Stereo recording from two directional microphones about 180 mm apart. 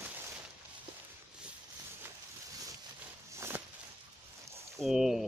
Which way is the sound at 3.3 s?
15° right (ahead or behind).